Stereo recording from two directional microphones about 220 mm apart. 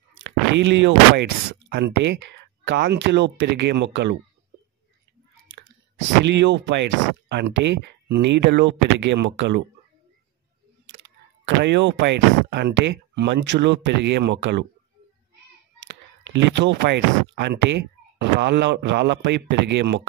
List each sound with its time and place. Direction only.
0.7 s speech: 55° right (ahead or behind)
5.9 s speech: 50° right (ahead or behind)
11.4 s speech: 55° right (ahead or behind)
16.3 s speech: 55° right (ahead or behind)